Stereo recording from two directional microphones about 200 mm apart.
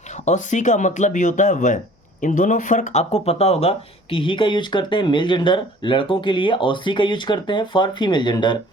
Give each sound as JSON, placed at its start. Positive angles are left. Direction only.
{"t": 0.1, "sound": "speech", "side_deg": 35}